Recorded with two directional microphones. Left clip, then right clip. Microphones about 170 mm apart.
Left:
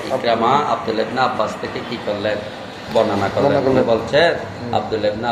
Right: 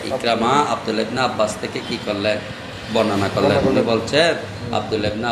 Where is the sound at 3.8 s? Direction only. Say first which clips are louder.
Left 2 dB; 45° right (ahead or behind).